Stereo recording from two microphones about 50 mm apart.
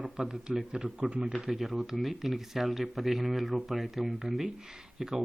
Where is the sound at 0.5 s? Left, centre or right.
Centre.